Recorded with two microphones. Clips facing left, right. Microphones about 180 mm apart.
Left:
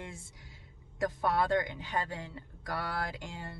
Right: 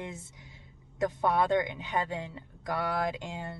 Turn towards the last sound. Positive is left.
turn(degrees=-20)  # may be behind; listen again after turning